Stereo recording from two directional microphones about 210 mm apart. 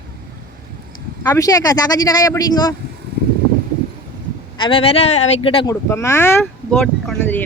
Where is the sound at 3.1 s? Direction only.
50° right (ahead or behind).